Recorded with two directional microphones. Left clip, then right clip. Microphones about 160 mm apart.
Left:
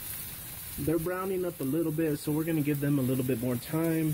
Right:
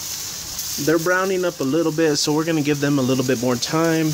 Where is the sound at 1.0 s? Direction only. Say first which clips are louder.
Right 13 dB; 10° right (ahead or behind).